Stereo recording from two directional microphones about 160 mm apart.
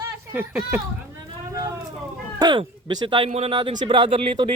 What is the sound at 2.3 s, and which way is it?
Speech, 25° right (ahead or behind).